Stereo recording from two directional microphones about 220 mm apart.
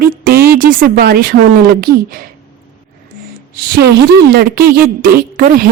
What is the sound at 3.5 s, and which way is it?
A woman's voice, 45° right (ahead or behind).